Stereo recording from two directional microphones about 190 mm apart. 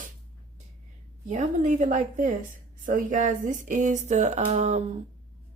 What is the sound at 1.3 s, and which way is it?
Speech, 40° right (ahead or behind).